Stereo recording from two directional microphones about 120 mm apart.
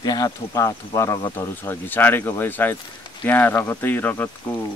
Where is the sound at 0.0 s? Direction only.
30° left (ahead or behind).